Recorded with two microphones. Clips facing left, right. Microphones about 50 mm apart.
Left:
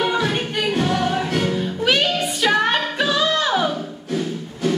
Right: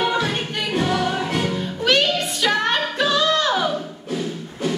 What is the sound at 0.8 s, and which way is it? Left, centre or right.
Music, centre.